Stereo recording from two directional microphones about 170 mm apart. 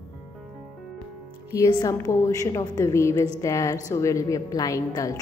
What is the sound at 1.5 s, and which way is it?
Speech, 20° left (ahead or behind).